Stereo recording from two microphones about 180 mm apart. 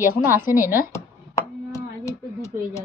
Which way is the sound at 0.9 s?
15° left (ahead or behind).